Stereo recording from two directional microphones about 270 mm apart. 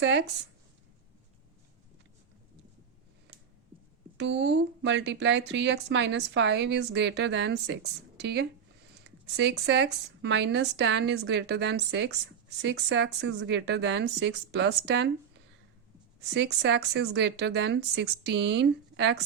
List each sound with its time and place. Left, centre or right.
0.0 s speech: right
4.2 s speech: right
16.3 s speech: right